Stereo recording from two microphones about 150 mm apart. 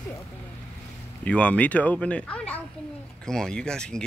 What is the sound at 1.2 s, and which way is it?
Speech, 10° left (ahead or behind).